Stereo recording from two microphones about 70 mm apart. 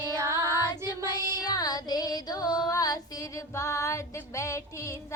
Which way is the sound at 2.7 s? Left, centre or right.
Left.